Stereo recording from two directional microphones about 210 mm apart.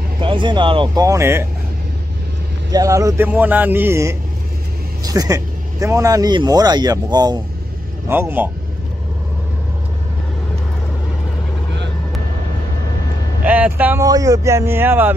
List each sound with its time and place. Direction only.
0.2 s speech: 25° right (ahead or behind)
2.7 s speech: 15° right (ahead or behind)
13.5 s speech: 10° right (ahead or behind)